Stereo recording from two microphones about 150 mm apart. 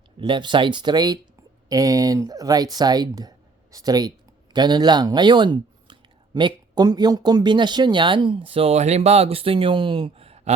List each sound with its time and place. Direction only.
0.2 s speech: 30° right (ahead or behind)